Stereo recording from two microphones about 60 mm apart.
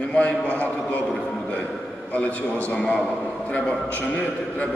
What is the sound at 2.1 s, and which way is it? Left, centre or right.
A man's voice, left.